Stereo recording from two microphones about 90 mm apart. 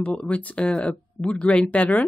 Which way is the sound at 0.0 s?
15° left (ahead or behind).